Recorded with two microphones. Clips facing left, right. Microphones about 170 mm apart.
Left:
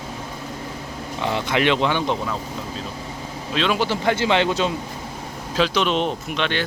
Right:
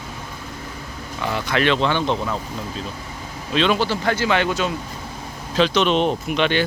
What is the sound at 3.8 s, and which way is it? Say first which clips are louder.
Speech: even; 20° left (ahead or behind).